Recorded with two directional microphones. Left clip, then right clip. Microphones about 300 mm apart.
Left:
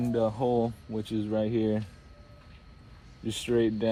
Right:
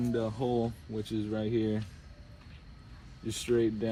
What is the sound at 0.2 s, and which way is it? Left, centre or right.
Speech, left.